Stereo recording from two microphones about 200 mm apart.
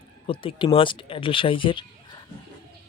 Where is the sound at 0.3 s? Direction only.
25° left (ahead or behind).